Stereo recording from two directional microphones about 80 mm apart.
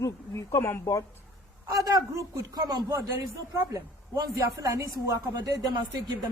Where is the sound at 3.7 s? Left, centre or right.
Right.